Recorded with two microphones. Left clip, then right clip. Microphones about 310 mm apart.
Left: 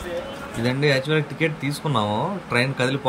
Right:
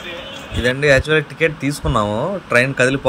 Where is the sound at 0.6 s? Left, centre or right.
Centre.